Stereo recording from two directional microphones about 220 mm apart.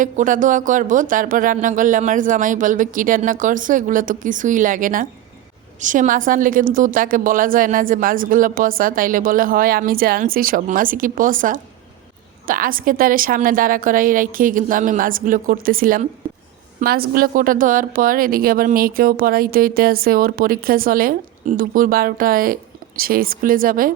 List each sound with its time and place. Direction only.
0.0 s a woman's voice: 35° right (ahead or behind)